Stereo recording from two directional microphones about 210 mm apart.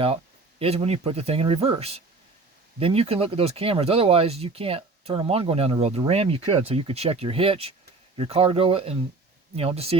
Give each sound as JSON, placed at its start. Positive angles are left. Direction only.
{"t": 0.6, "sound": "speech", "side_deg": -30}